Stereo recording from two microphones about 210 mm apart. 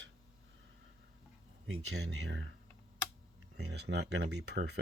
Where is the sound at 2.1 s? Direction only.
60° right (ahead or behind).